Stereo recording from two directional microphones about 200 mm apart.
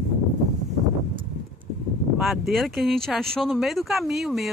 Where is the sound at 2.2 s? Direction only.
Centre (ahead or behind).